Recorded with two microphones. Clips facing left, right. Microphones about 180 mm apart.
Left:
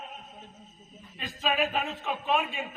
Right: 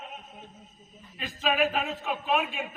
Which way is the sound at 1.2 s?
Centre (ahead or behind).